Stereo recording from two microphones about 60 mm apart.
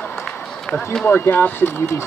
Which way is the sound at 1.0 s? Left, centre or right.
Left.